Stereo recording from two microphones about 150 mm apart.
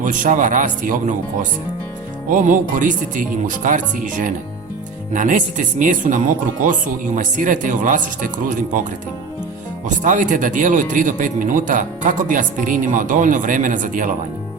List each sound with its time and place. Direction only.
0.0 s speech: 60° right (ahead or behind)